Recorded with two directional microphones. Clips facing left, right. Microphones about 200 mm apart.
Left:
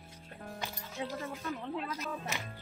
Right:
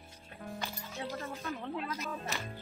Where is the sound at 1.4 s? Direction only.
Centre (ahead or behind).